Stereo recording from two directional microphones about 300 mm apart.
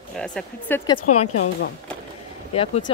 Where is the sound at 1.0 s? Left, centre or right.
Left.